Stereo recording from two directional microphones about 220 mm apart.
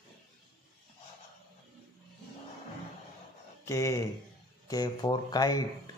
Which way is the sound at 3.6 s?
15° left (ahead or behind).